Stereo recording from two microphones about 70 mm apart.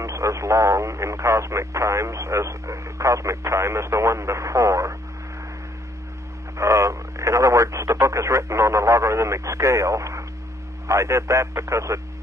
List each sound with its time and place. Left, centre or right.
0.0 s speech: right
6.5 s speech: right